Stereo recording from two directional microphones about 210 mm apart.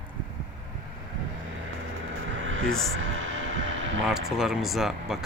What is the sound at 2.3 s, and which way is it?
Vehicle, 70° right (ahead or behind).